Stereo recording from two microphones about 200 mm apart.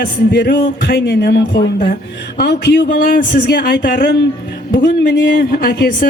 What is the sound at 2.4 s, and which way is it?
Speech, 50° left (ahead or behind).